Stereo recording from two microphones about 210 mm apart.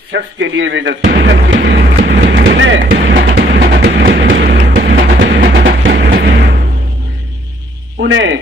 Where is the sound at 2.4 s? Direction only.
60° right (ahead or behind).